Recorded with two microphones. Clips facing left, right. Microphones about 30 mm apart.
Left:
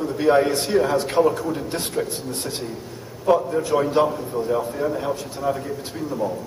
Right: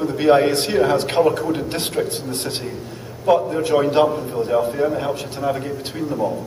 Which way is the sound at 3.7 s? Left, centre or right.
Right.